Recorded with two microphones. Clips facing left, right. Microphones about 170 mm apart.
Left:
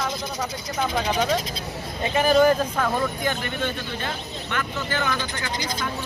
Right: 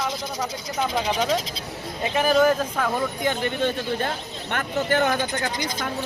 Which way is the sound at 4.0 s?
50° right (ahead or behind).